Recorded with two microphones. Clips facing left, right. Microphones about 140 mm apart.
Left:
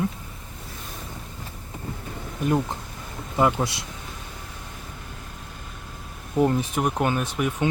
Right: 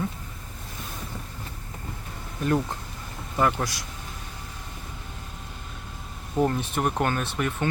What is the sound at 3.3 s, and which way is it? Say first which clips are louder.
Speech: left 3 dB; 20° left (ahead or behind).